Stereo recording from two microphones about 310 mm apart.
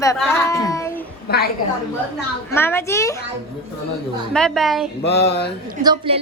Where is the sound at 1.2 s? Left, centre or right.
Left.